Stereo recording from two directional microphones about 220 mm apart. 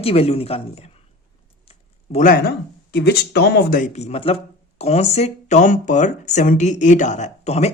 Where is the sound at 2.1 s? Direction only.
40° left (ahead or behind).